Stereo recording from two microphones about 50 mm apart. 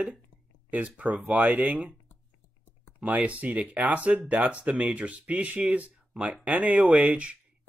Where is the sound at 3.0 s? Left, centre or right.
Right.